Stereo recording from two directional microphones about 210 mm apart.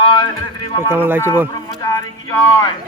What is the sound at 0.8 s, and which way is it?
Speech, 10° right (ahead or behind).